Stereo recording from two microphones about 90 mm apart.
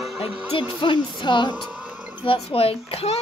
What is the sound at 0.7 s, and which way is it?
Speech, 65° left (ahead or behind).